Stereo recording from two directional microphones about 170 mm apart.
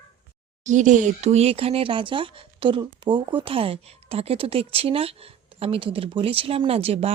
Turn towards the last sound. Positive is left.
turn(degrees=-35)  # may be behind; listen again after turning